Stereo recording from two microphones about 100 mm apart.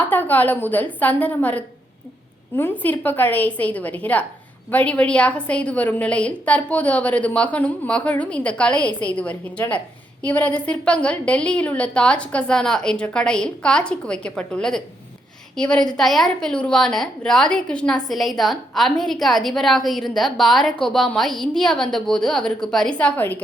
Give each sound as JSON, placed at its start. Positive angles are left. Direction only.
{"t": 0.0, "sound": "a woman's voice", "side_deg": 20}